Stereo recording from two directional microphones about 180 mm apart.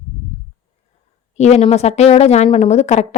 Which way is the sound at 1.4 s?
35° left (ahead or behind).